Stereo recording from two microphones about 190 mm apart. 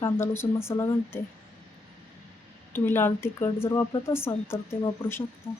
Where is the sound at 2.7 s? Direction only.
10° left (ahead or behind).